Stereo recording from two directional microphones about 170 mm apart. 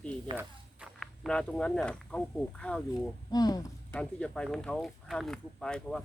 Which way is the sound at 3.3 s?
25° left (ahead or behind).